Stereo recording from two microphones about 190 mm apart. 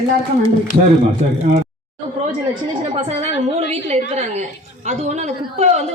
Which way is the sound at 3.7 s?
35° right (ahead or behind).